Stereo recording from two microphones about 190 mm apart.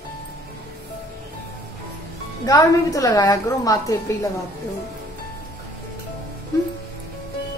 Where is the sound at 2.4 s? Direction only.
20° left (ahead or behind).